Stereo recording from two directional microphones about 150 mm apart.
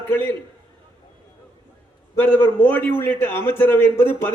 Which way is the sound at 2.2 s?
15° left (ahead or behind).